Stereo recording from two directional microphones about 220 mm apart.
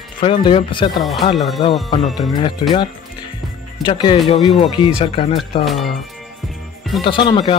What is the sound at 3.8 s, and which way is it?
Speech, 25° left (ahead or behind).